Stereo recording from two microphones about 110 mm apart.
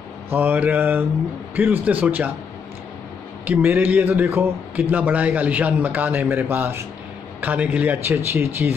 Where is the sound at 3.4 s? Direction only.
15° right (ahead or behind).